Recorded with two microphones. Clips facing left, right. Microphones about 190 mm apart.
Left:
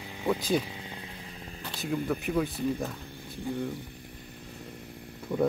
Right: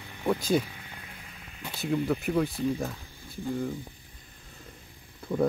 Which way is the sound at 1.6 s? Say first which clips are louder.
Right 3 dB; 5° right (ahead or behind).